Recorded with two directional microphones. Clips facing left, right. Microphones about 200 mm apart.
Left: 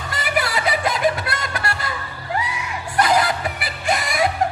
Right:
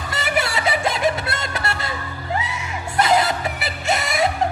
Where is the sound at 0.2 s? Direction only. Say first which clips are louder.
Even; 25° right (ahead or behind).